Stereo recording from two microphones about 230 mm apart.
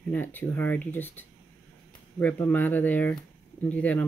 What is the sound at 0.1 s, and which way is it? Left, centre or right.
Speech, centre.